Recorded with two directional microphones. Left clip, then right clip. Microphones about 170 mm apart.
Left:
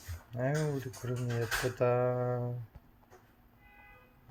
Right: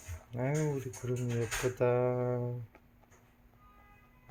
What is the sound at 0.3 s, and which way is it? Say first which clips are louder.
Speech: even; 25° right (ahead or behind).